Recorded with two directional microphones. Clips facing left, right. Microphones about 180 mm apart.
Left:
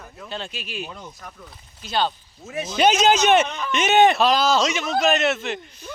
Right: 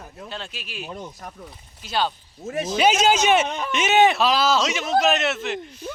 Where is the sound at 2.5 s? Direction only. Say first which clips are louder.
Right 3 dB; 45° right (ahead or behind).